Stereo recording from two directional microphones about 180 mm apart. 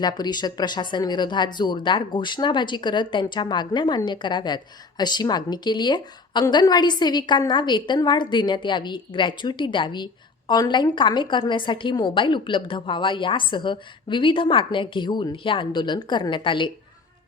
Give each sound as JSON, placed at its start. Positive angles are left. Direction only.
{"t": 0.0, "sound": "speech", "side_deg": 25}